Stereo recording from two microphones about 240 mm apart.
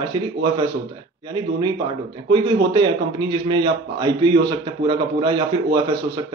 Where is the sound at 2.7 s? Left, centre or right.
Centre.